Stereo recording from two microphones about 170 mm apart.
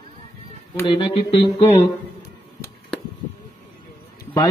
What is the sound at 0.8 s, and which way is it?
Music, 30° left (ahead or behind).